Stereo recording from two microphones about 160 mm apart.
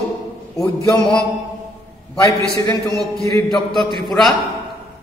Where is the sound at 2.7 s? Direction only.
Centre (ahead or behind).